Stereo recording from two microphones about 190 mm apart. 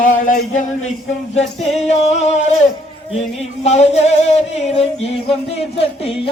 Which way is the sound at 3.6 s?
35° left (ahead or behind).